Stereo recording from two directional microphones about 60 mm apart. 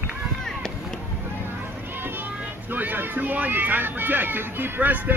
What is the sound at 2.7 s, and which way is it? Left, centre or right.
Speech, right.